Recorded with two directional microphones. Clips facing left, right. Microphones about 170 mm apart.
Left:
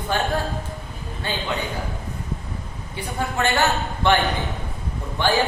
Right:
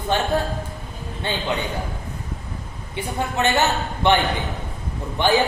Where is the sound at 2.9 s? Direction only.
20° right (ahead or behind).